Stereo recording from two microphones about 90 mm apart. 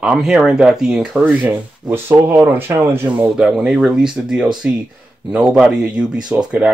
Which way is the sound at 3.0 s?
10° right (ahead or behind).